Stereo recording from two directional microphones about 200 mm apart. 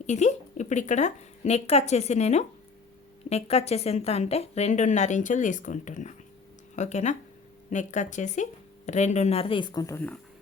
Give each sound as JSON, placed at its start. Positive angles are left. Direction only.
{"t": 0.0, "sound": "a woman's voice", "side_deg": 35}